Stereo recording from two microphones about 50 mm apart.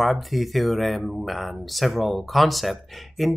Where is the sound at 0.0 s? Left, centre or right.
Centre.